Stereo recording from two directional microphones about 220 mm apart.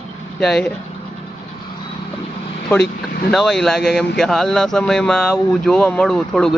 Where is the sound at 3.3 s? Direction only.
Centre (ahead or behind).